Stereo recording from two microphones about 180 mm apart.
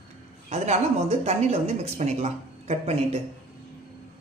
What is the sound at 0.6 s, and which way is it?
Speech, 35° right (ahead or behind).